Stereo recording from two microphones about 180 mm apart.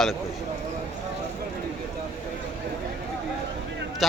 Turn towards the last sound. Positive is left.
turn(degrees=0)  # may be behind; listen again after turning